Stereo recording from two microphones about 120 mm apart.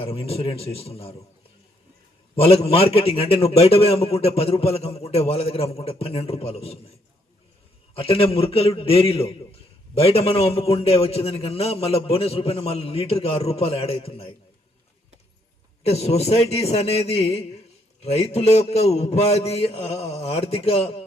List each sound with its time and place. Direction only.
0.0 s a man's voice: 55° left (ahead or behind)
2.3 s a man's voice: 55° left (ahead or behind)
7.9 s a man's voice: 55° left (ahead or behind)
15.8 s a man's voice: 60° left (ahead or behind)